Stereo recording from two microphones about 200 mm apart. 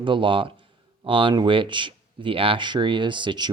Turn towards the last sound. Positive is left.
turn(degrees=-25)  # may be behind; listen again after turning